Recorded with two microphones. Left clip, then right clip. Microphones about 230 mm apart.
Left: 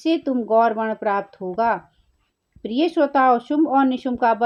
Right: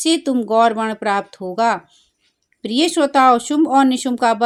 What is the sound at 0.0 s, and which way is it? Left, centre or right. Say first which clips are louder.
Speech: right 4 dB; right.